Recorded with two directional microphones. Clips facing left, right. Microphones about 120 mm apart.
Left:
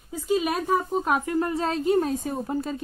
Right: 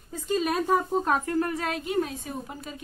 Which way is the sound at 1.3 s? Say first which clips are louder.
Left 2 dB; 25° left (ahead or behind).